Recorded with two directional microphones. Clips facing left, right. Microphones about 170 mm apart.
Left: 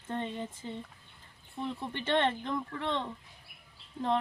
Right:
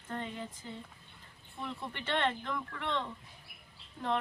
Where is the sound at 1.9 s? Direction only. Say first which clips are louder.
Left 4 dB; 25° left (ahead or behind).